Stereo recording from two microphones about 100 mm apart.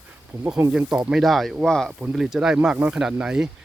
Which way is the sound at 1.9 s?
10° right (ahead or behind).